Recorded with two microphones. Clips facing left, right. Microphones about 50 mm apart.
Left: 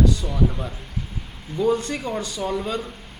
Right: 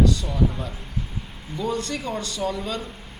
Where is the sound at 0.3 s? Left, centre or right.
Centre.